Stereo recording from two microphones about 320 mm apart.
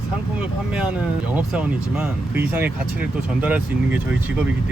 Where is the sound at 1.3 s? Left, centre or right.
Centre.